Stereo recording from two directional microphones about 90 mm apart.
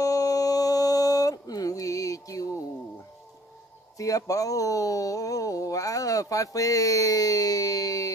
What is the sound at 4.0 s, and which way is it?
Speech, 40° left (ahead or behind).